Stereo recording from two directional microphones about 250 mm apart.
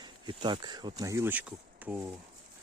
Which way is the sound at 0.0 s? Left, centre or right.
Centre.